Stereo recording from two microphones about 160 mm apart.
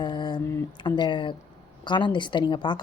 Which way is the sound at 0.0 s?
25° left (ahead or behind).